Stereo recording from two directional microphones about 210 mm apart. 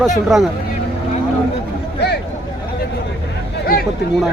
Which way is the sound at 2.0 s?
50° left (ahead or behind).